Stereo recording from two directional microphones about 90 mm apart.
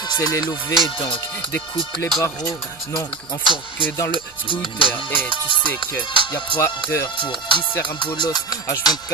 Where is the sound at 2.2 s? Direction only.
45° left (ahead or behind).